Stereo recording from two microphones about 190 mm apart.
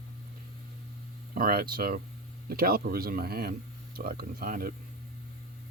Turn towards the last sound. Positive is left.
turn(degrees=-50)  # may be behind; listen again after turning